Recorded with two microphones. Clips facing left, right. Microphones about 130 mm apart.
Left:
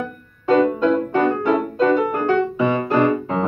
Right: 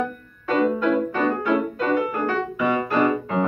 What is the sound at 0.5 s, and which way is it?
Music, 30° left (ahead or behind).